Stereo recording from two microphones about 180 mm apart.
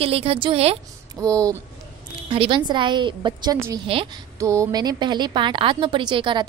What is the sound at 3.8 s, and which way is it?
Speech, 30° right (ahead or behind).